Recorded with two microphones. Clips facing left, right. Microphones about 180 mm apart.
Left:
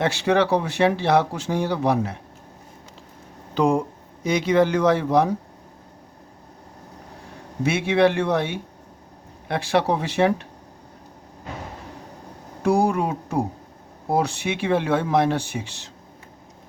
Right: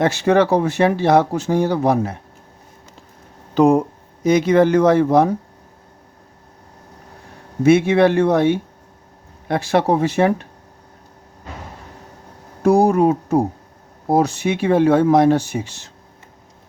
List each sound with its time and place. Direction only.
0.0 s speech: 45° right (ahead or behind)
3.5 s speech: 45° right (ahead or behind)
7.6 s speech: 45° right (ahead or behind)
12.6 s speech: 40° right (ahead or behind)